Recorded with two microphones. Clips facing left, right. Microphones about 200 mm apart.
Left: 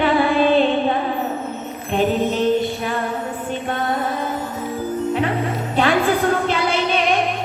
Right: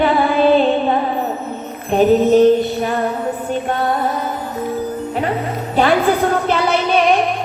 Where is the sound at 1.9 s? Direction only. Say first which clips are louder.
Right 8 dB; 45° right (ahead or behind).